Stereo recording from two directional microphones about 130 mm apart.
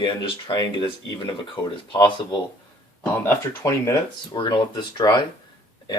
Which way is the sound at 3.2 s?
20° left (ahead or behind).